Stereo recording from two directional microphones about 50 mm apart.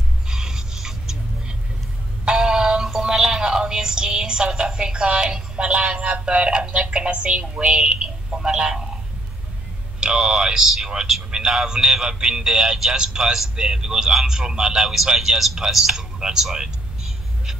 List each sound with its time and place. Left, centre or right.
0.3 s a sound: centre
2.2 s synthetic singing: centre
9.9 s speech: centre